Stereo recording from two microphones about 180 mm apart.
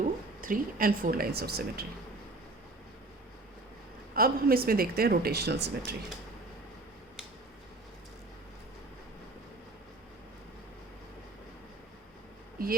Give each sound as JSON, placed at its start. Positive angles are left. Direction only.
{"t": 0.0, "sound": "speech", "side_deg": -50}
{"t": 4.1, "sound": "speech", "side_deg": -55}